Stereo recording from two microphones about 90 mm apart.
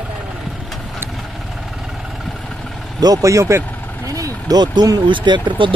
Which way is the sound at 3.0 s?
40° right (ahead or behind).